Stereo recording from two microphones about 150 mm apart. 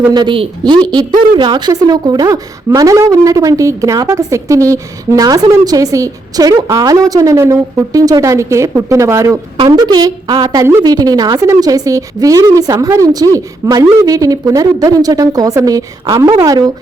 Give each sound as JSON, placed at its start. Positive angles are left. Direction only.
{"t": 0.1, "sound": "a woman's voice", "side_deg": -30}